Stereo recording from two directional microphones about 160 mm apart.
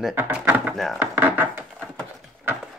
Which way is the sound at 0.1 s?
10° right (ahead or behind).